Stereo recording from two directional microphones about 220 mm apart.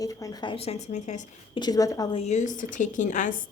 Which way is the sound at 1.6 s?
15° left (ahead or behind).